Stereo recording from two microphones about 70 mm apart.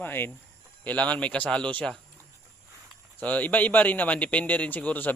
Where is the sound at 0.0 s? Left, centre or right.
Left.